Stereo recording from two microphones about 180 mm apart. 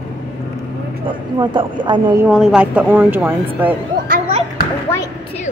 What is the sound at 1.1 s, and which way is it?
Speech, 25° right (ahead or behind).